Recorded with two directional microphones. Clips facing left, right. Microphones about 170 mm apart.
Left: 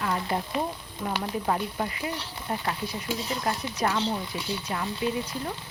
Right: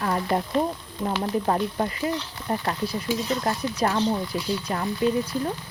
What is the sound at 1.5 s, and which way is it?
Speech, 45° right (ahead or behind).